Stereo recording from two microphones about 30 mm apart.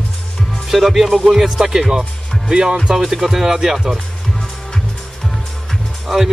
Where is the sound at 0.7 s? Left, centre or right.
Centre.